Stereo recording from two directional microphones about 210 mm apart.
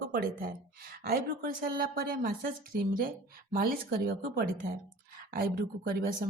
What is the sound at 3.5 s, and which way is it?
Speech, 45° right (ahead or behind).